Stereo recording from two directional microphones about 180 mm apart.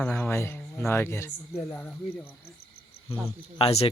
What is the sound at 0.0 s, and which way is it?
Speech, 10° left (ahead or behind).